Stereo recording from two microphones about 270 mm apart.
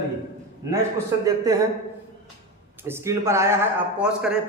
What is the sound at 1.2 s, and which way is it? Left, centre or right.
Speech, centre.